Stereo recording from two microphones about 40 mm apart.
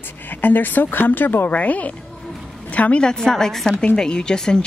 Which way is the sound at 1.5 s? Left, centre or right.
Left.